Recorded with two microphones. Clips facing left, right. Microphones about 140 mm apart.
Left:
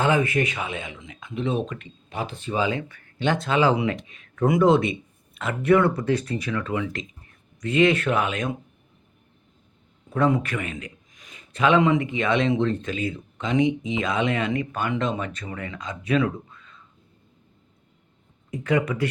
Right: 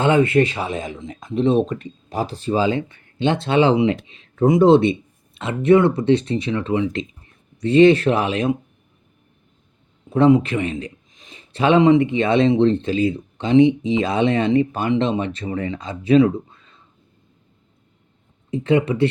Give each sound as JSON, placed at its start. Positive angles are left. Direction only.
{"t": 0.0, "sound": "a man's voice", "side_deg": -25}
{"t": 10.1, "sound": "a man's voice", "side_deg": -25}
{"t": 18.5, "sound": "speech", "side_deg": -25}